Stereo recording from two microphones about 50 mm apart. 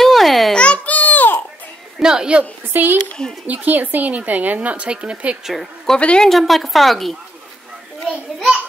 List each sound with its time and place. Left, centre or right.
0.0 s babbling: centre
0.6 s a sound: left
2.0 s a woman's voice: centre
2.7 s a woman's voice: right
5.4 s a woman's voice: centre
5.9 s a woman's voice: left
6.2 s a woman's voice: centre